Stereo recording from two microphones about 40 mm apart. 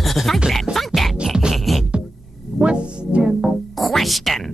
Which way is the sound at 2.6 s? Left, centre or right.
Right.